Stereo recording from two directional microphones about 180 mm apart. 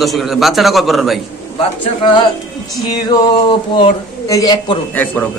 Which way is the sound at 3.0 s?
25° left (ahead or behind).